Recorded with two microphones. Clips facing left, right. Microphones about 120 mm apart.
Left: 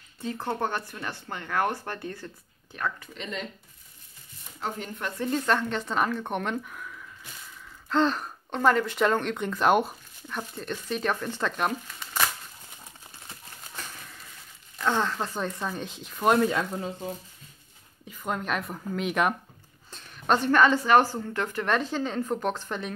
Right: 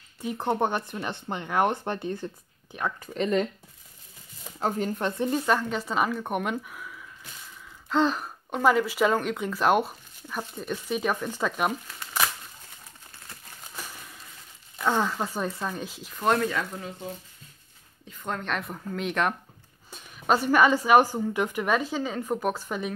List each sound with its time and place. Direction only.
0.2 s speech: 15° right (ahead or behind)
3.0 s speech: 45° right (ahead or behind)
4.6 s speech: 40° right (ahead or behind)
5.2 s speech: 10° right (ahead or behind)
13.8 s a sound: 10° right (ahead or behind)
14.8 s speech: 10° right (ahead or behind)
16.4 s speech: 25° left (ahead or behind)
18.0 s speech: 10° left (ahead or behind)
19.9 s a woman's voice: 5° right (ahead or behind)